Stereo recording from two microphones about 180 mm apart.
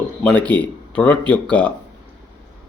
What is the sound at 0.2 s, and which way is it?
A man's voice, 5° left (ahead or behind).